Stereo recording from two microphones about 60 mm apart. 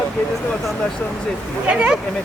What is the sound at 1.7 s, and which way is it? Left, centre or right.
Speech, centre.